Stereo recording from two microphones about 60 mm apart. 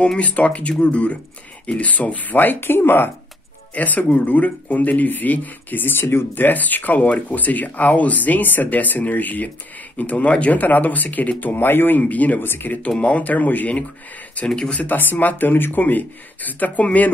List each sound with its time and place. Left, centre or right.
0.2 s speech: left
12.0 s speech: left
14.5 s speech: centre
14.8 s speech: left